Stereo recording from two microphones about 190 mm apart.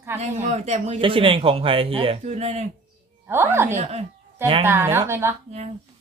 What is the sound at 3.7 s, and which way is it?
Speech, 35° right (ahead or behind).